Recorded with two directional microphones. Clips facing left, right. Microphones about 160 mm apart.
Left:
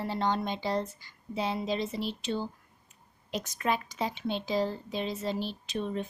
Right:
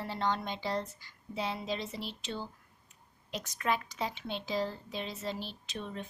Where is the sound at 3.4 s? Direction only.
20° left (ahead or behind).